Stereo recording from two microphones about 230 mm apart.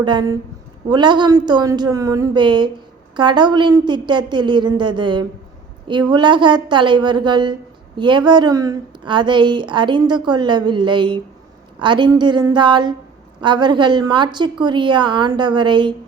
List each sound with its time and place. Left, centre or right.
0.0 s a woman's voice: centre